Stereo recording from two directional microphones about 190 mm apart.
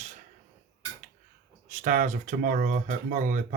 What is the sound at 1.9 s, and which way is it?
Speech, 40° right (ahead or behind).